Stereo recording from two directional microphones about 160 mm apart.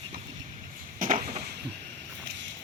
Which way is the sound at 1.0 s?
60° right (ahead or behind).